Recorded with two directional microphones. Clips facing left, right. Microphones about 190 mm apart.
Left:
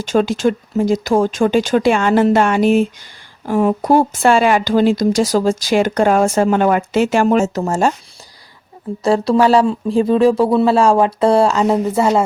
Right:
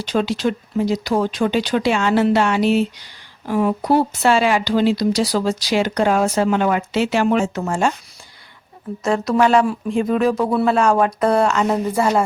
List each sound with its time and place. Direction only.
0.0 s speech: 45° left (ahead or behind)
9.0 s speech: 30° left (ahead or behind)